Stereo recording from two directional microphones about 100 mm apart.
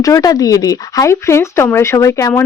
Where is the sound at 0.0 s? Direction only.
35° left (ahead or behind).